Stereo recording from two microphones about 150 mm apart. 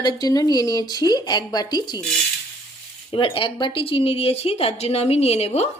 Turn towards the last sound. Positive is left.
turn(degrees=45)  # may be behind; listen again after turning